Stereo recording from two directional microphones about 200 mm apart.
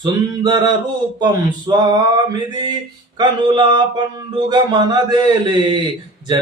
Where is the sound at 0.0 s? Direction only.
20° right (ahead or behind).